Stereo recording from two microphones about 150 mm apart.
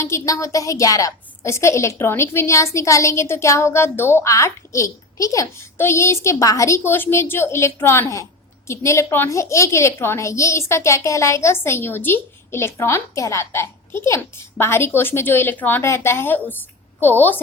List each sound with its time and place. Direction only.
0.0 s a woman's voice: 20° left (ahead or behind)